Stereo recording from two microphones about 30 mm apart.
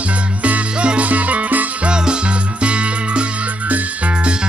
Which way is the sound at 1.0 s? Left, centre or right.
Right.